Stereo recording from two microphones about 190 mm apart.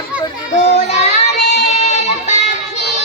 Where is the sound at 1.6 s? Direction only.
35° left (ahead or behind).